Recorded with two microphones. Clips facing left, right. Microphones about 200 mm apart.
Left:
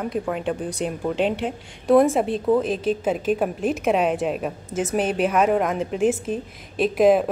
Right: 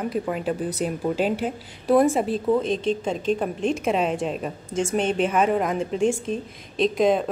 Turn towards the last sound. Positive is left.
turn(degrees=5)  # may be behind; listen again after turning